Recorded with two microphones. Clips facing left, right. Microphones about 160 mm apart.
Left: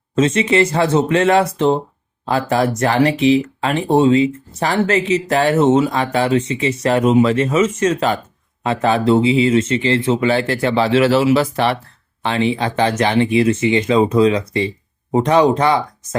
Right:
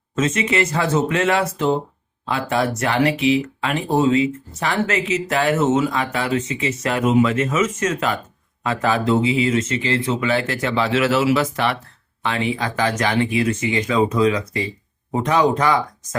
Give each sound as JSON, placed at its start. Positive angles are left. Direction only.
{"t": 0.2, "sound": "speech", "side_deg": 30}